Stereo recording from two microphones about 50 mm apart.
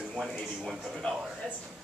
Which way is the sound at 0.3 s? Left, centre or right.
Centre.